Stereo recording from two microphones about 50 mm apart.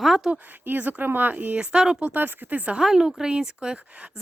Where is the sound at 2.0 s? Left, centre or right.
Right.